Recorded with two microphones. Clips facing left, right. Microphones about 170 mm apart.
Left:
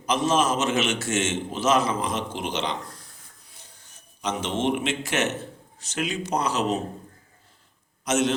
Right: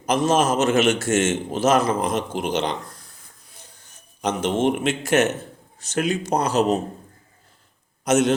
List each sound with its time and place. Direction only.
0.0 s a man's voice: 45° right (ahead or behind)
4.2 s a man's voice: 50° right (ahead or behind)
8.0 s a man's voice: 50° right (ahead or behind)